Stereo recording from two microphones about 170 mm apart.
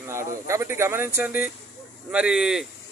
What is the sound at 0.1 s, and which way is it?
Speech, 15° right (ahead or behind).